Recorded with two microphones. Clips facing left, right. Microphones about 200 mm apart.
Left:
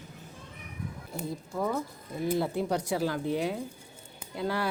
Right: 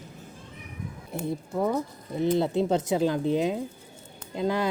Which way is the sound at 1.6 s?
20° right (ahead or behind).